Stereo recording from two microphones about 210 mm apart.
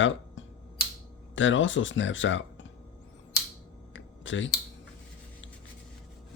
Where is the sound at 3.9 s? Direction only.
65° left (ahead or behind).